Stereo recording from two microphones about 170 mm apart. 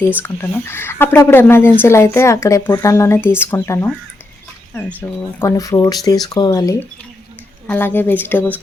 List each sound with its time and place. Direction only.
0.2 s speech: 15° left (ahead or behind)
4.9 s speech: 15° left (ahead or behind)